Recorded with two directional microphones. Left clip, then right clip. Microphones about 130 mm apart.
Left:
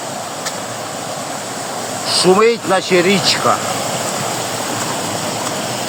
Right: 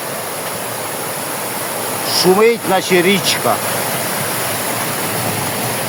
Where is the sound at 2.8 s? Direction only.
25° right (ahead or behind).